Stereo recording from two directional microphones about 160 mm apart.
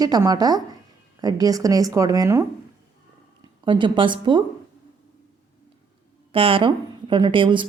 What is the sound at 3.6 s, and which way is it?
Speech, 30° right (ahead or behind).